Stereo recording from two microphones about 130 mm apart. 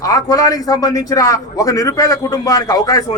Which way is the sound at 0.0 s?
25° left (ahead or behind).